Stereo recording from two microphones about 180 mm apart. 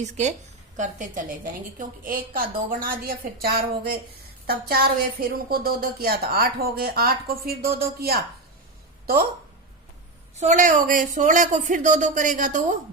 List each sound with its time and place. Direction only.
0.0 s a woman's voice: 40° right (ahead or behind); by 8.2 s 60° right (ahead or behind)
10.3 s speech: 40° right (ahead or behind)